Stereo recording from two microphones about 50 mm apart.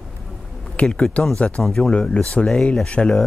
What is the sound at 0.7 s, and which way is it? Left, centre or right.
Speech, left.